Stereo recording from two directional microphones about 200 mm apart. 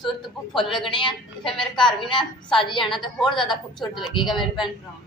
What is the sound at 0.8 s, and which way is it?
A woman's voice, 25° left (ahead or behind).